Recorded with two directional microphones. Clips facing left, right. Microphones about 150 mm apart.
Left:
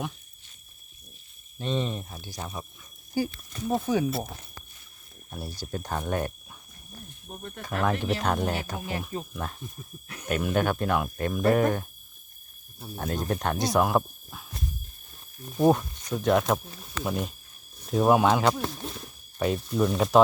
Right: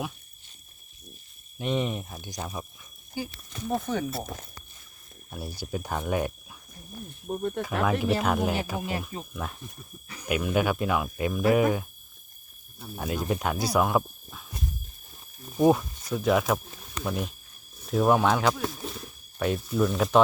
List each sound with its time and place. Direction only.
1.5 s speech: 15° right (ahead or behind)
2.4 s speech: centre (ahead or behind)
3.8 s speech: 10° left (ahead or behind)
5.5 s speech: 10° right (ahead or behind)
7.3 s speech: 55° right (ahead or behind)
7.6 s speech: 5° right (ahead or behind)
13.0 s speech: 5° right (ahead or behind)
15.5 s speech: centre (ahead or behind)